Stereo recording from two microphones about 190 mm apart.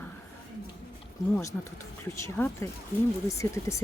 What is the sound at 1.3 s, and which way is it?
Speech, 15° left (ahead or behind).